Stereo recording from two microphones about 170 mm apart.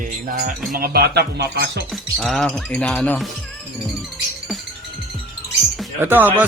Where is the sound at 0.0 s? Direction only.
55° right (ahead or behind).